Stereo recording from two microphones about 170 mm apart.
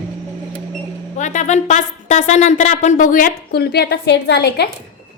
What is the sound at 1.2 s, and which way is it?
A woman's voice, 45° left (ahead or behind).